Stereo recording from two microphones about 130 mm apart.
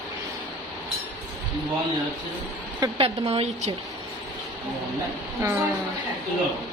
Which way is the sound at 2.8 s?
30° right (ahead or behind).